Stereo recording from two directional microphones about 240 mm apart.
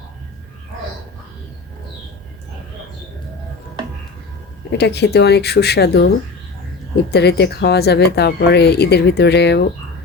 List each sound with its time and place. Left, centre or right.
4.7 s speech: left